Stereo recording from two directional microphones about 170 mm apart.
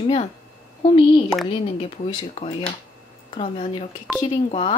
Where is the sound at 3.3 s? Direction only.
30° left (ahead or behind).